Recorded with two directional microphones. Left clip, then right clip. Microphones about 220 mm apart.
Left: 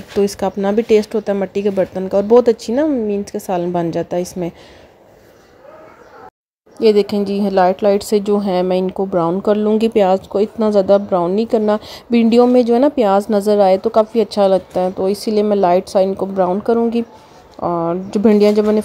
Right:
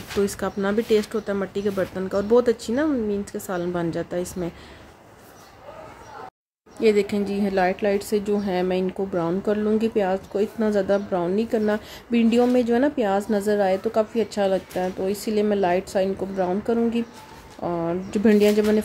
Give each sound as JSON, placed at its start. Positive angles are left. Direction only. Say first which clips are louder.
{"t": 0.2, "sound": "a woman's voice", "louder": "left 8 dB", "side_deg": 20}
{"t": 6.8, "sound": "a woman's voice", "louder": "left 7 dB", "side_deg": 25}